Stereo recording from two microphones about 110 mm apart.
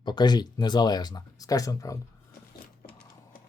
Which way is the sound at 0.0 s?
40° left (ahead or behind).